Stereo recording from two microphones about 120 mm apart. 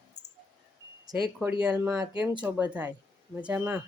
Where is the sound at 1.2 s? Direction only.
5° right (ahead or behind).